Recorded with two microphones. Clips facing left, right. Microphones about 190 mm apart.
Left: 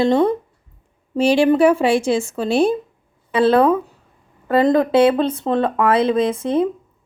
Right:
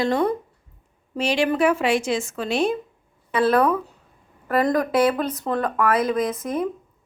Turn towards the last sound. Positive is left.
turn(degrees=30)  # may be behind; listen again after turning